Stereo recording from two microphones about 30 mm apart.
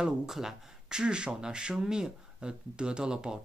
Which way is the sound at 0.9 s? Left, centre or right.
Right.